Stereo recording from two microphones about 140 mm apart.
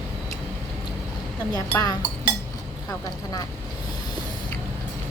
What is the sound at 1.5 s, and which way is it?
Speech, 25° left (ahead or behind).